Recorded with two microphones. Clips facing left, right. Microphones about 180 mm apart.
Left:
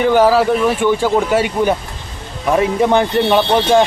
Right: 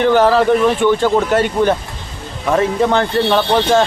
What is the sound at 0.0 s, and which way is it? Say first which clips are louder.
Speech: even; 10° left (ahead or behind).